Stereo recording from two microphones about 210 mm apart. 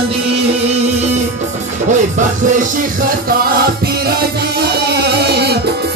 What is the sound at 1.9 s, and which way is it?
Music, 35° right (ahead or behind).